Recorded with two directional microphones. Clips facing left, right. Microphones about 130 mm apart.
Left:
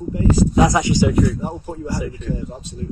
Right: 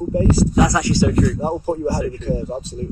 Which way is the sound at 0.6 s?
20° left (ahead or behind).